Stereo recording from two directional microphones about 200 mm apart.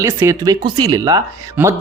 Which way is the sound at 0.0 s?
15° right (ahead or behind).